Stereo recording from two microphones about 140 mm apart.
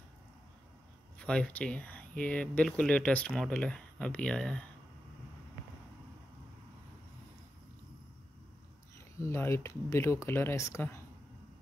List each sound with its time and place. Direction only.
1.2 s speech: 10° left (ahead or behind)
8.9 s speech: 20° left (ahead or behind)